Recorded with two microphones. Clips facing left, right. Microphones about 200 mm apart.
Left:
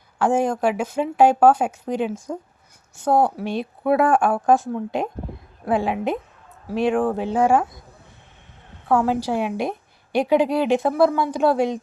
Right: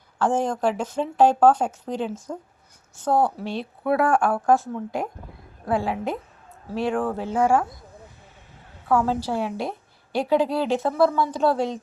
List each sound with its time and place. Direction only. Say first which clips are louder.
0.2 s a woman's voice: left 3 dB; 10° left (ahead or behind)
8.9 s a woman's voice: left 2 dB; 15° left (ahead or behind)